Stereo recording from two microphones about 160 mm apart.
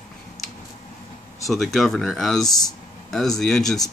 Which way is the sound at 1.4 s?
Centre (ahead or behind).